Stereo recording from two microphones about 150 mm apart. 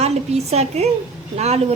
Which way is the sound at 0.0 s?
45° right (ahead or behind).